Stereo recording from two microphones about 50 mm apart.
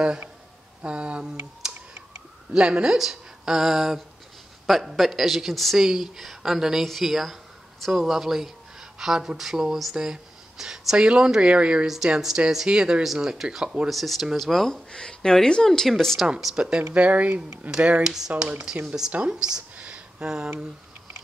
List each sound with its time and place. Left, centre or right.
0.8 s speech: right
1.6 s clicking: centre
2.5 s speech: centre
11.9 s speech: centre
14.9 s speech: centre
16.5 s speech: centre
19.1 s a sound: centre